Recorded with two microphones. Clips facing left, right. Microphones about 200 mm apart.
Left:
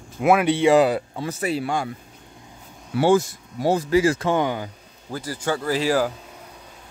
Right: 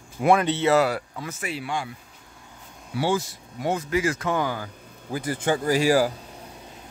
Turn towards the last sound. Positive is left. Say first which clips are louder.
# right 1 dB
turn(degrees=-10)  # may be behind; listen again after turning